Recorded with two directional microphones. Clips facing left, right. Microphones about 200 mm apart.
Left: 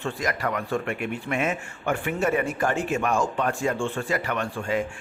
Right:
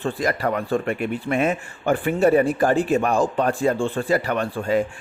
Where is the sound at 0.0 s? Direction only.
35° right (ahead or behind).